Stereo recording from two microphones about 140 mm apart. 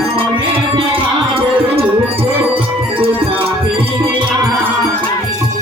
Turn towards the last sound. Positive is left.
turn(degrees=-40)  # may be behind; listen again after turning